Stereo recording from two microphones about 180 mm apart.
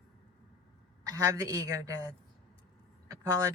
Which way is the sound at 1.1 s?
20° right (ahead or behind).